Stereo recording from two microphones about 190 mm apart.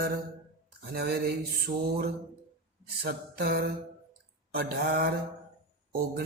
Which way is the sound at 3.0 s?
55° right (ahead or behind).